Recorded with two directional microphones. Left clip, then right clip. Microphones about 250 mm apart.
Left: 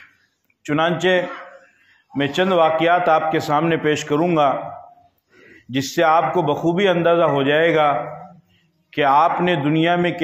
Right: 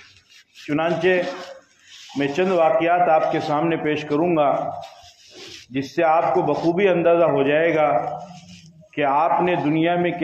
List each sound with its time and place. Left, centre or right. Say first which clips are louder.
0.7 s a man's voice: left 2 dB; left
5.7 s a man's voice: left 2 dB; left
8.9 s a man's voice: left 3 dB; left